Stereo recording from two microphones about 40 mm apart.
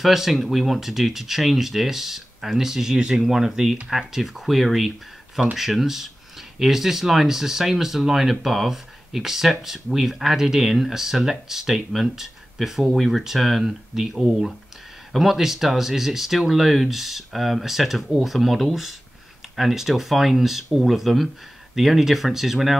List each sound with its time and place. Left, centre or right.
0.0 s speech: centre